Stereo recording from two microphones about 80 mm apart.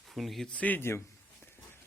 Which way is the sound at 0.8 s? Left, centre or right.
Left.